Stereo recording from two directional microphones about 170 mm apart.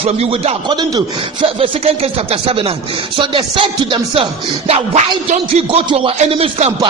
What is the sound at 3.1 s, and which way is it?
Music, 30° right (ahead or behind).